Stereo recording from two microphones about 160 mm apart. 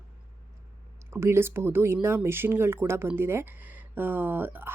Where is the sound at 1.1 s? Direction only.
15° right (ahead or behind).